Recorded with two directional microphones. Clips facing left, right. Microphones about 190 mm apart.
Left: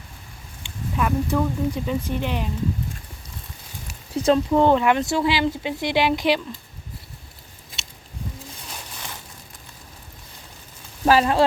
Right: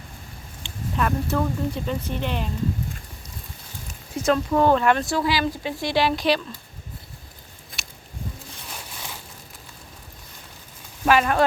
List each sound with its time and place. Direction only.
0.6 s speech: 10° left (ahead or behind)
4.1 s speech: 30° left (ahead or behind)
4.5 s speech: 20° left (ahead or behind)
11.0 s speech: 30° left (ahead or behind)